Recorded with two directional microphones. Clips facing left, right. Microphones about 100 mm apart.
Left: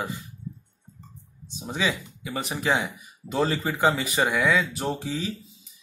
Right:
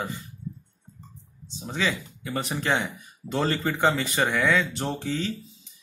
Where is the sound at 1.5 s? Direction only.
15° left (ahead or behind).